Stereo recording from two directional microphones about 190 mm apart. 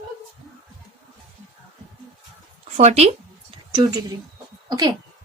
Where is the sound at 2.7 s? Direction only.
35° right (ahead or behind).